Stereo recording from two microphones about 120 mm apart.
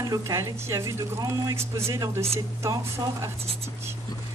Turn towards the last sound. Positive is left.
turn(degrees=-20)  # may be behind; listen again after turning